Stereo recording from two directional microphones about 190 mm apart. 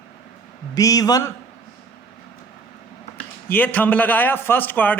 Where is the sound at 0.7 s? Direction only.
20° left (ahead or behind).